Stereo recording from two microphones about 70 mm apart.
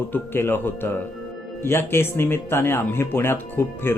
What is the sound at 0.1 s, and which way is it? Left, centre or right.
Speech, left.